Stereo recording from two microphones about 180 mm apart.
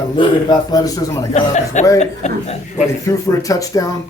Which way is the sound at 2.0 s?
35° left (ahead or behind).